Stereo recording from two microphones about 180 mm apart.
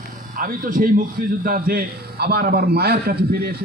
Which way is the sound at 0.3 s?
50° right (ahead or behind).